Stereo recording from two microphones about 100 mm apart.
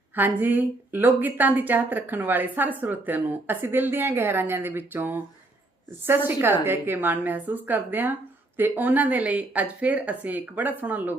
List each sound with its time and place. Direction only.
0.2 s a woman's voice: 20° right (ahead or behind)